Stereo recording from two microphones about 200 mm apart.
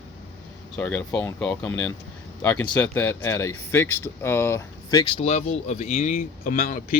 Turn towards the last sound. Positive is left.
turn(degrees=45)  # may be behind; listen again after turning